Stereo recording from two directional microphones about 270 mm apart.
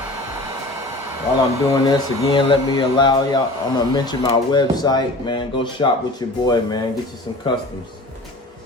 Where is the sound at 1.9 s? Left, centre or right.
Centre.